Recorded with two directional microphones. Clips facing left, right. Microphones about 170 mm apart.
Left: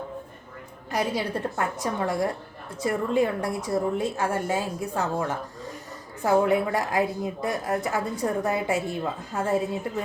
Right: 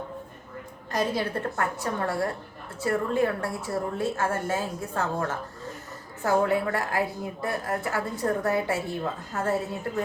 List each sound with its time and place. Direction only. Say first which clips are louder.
0.9 s a woman's voice: even; 15° left (ahead or behind)
6.2 s a woman's voice: left 2 dB; 20° left (ahead or behind)